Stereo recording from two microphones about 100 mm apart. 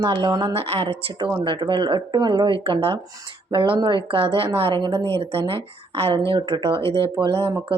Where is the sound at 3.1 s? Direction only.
40° right (ahead or behind).